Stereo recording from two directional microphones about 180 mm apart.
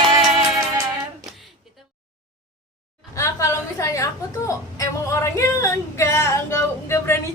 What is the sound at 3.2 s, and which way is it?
A woman's voice, 15° left (ahead or behind).